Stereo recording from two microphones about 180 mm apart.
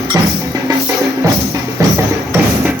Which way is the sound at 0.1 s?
20° right (ahead or behind).